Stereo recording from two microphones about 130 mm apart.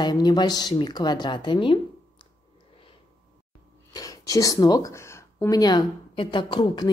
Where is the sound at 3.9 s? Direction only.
25° left (ahead or behind).